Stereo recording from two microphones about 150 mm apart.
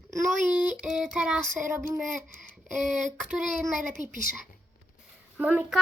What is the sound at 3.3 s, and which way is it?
Speech, centre (ahead or behind).